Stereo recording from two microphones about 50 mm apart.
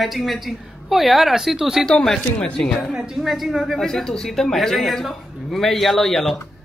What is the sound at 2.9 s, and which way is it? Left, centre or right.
Speech, centre.